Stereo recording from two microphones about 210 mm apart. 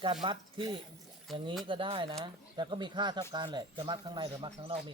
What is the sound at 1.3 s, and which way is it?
Speech, centre (ahead or behind).